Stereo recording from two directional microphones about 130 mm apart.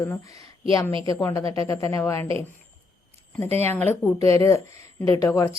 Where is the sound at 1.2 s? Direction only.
25° left (ahead or behind).